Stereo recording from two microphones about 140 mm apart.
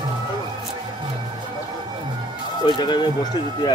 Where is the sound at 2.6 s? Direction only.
35° left (ahead or behind).